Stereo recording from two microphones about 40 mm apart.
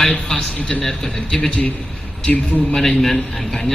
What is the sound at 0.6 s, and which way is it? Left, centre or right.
Speech, left.